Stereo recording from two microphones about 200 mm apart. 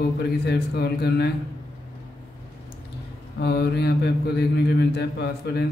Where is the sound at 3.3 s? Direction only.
55° left (ahead or behind).